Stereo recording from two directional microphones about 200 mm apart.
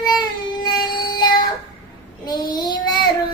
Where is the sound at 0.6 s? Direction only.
20° left (ahead or behind).